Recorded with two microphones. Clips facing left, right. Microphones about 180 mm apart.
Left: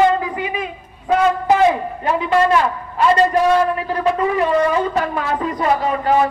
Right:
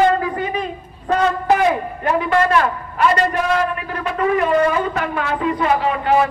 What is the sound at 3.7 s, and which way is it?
A man's voice, 35° left (ahead or behind).